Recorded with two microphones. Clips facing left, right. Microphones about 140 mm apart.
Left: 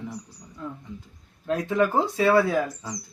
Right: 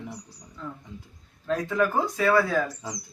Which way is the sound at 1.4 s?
20° left (ahead or behind).